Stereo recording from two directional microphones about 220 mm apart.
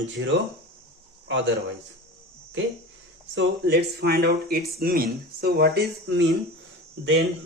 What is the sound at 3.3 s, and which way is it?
Speech, 50° right (ahead or behind).